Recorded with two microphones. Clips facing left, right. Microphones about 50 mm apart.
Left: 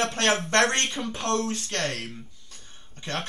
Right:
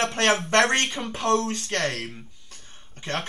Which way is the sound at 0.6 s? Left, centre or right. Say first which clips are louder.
Right 2 dB; right.